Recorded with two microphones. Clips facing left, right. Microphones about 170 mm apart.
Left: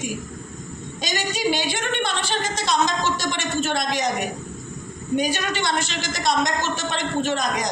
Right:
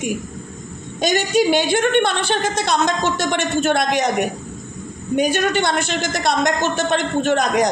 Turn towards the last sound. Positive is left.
turn(degrees=-60)  # may be behind; listen again after turning